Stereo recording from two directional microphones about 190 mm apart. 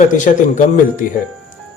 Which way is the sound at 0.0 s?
40° left (ahead or behind).